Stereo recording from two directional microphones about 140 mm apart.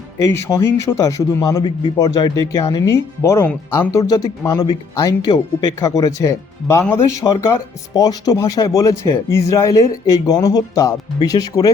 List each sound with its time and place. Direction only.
0.3 s speech: 20° left (ahead or behind)